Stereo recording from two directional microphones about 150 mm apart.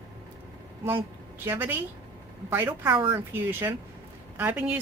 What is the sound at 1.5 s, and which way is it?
A woman's voice, 15° right (ahead or behind).